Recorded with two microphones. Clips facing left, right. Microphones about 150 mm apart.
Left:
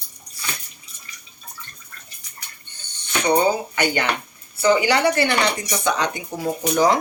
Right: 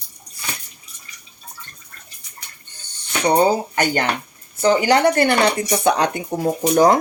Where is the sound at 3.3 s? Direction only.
40° right (ahead or behind); by 6.2 s 60° right (ahead or behind).